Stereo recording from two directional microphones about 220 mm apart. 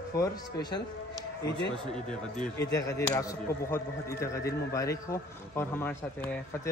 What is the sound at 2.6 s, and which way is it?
A man's voice, 15° left (ahead or behind).